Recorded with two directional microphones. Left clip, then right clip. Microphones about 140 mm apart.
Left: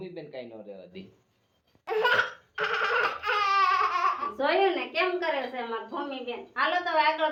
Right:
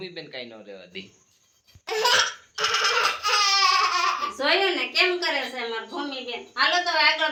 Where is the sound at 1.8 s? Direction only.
30° left (ahead or behind).